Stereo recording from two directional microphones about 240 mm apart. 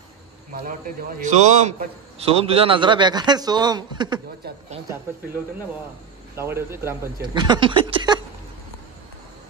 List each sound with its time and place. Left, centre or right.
0.5 s a man's voice: right; by 4.2 s centre
6.3 s speech: centre